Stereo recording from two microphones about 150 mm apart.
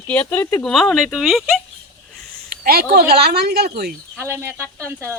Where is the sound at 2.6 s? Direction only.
85° right.